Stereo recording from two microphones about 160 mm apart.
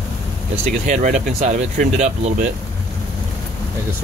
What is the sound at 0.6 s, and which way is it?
Speech, 50° right (ahead or behind).